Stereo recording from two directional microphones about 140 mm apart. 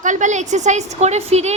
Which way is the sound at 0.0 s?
60° right (ahead or behind).